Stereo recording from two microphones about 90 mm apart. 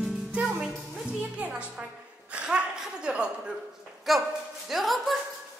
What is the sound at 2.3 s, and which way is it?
Chuckle, 10° right (ahead or behind).